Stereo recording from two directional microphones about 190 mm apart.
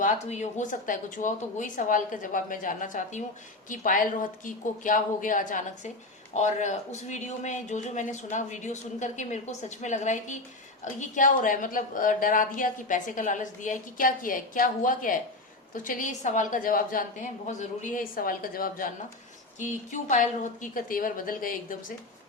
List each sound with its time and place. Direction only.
0.0 s a woman's voice: 40° left (ahead or behind)